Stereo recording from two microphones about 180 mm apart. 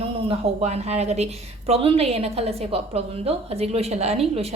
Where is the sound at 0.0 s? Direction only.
35° right (ahead or behind).